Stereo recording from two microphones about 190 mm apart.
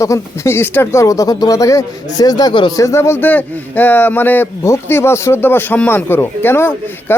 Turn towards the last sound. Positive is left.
turn(degrees=10)  # may be behind; listen again after turning